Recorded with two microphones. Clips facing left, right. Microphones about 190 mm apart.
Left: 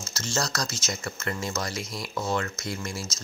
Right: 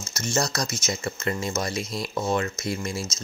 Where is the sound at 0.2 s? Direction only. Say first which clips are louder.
Right 4 dB; 20° right (ahead or behind).